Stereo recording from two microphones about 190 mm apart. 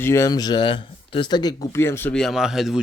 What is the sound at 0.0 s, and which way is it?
Speech, 15° left (ahead or behind).